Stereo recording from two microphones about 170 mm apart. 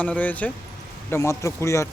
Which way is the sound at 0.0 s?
10° left (ahead or behind).